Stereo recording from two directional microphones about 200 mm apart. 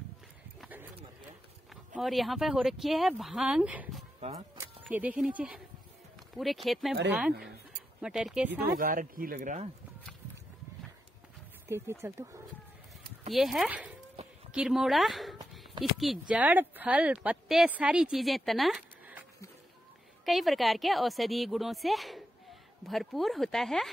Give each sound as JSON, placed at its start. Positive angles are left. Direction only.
{"t": 0.6, "sound": "a sound", "side_deg": -10}
{"t": 2.0, "sound": "speech", "side_deg": 0}
{"t": 8.7, "sound": "speech", "side_deg": -45}
{"t": 11.6, "sound": "speech", "side_deg": -10}
{"t": 13.3, "sound": "speech", "side_deg": 0}
{"t": 20.2, "sound": "a woman's voice", "side_deg": 0}